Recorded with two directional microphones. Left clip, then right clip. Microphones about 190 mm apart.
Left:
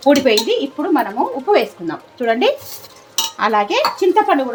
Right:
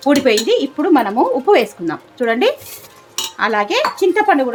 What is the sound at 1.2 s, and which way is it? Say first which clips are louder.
Speech: right 3 dB; 35° right (ahead or behind).